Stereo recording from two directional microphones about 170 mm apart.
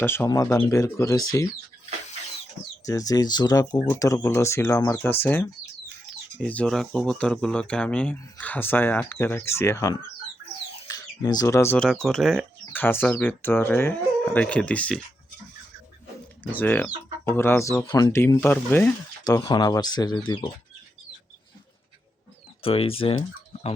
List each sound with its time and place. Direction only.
0.0 s speech: 15° left (ahead or behind)
2.8 s speech: 20° left (ahead or behind)
16.4 s speech: 10° left (ahead or behind)
19.2 s speech: 20° left (ahead or behind)
22.6 s speech: 35° left (ahead or behind)